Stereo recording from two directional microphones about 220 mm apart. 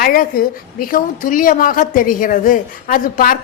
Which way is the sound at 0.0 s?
40° left (ahead or behind).